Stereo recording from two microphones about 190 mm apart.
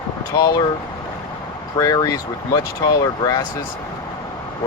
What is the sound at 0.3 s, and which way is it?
Speech, 20° left (ahead or behind).